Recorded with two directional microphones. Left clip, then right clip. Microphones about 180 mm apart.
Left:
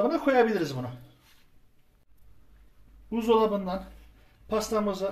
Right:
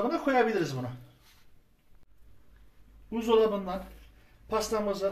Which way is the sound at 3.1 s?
55° left (ahead or behind).